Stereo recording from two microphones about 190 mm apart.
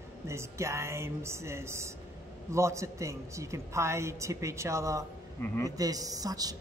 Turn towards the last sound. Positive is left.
turn(degrees=-20)  # may be behind; listen again after turning